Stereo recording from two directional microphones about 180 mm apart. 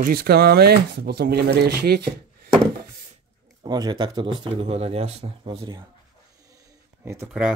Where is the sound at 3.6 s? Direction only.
25° right (ahead or behind).